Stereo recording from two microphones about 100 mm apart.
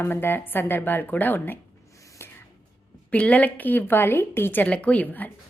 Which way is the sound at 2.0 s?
35° left (ahead or behind).